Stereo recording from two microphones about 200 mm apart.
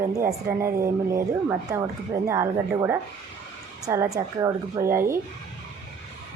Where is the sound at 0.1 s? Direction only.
15° right (ahead or behind).